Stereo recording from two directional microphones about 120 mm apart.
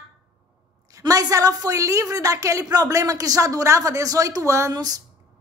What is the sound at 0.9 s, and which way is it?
A woman's voice, 30° right (ahead or behind).